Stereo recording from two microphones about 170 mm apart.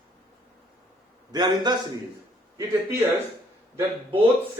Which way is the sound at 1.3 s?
25° right (ahead or behind).